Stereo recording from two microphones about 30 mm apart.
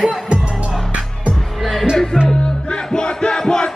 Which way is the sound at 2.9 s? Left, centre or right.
Left.